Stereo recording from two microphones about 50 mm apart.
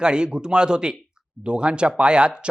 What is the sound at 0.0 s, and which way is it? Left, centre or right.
Speech, centre.